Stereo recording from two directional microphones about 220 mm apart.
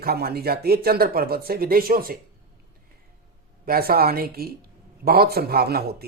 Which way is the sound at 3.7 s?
45° right (ahead or behind).